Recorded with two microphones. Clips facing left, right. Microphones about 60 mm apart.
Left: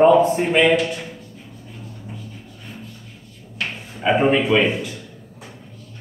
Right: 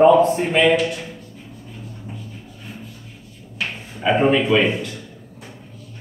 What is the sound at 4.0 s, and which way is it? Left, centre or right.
Speech, centre.